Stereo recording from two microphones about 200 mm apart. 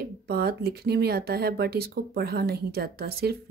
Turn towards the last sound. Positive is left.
turn(degrees=-50)  # may be behind; listen again after turning